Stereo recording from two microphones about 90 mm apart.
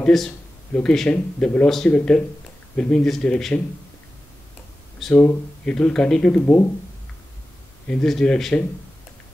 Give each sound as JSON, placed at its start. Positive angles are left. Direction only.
{"t": 0.0, "sound": "speech", "side_deg": 5}
{"t": 5.1, "sound": "speech", "side_deg": 25}
{"t": 5.7, "sound": "speech", "side_deg": 10}
{"t": 7.8, "sound": "speech", "side_deg": 10}